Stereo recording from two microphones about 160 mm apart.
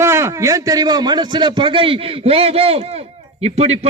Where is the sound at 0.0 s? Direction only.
15° right (ahead or behind).